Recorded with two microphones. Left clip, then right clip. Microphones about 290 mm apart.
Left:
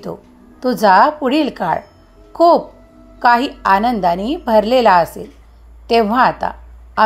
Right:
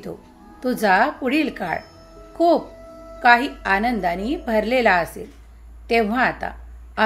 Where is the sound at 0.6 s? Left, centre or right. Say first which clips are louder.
Left 7 dB; centre.